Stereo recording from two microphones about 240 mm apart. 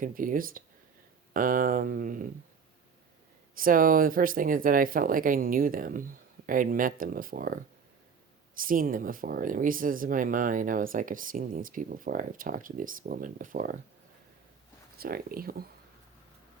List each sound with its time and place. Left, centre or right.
0.0 s speech: right
3.5 s speech: right
14.9 s speech: right